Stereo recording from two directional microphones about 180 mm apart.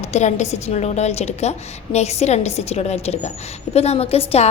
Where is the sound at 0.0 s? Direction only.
40° left (ahead or behind).